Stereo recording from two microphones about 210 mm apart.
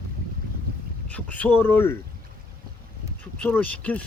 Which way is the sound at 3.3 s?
5° left (ahead or behind).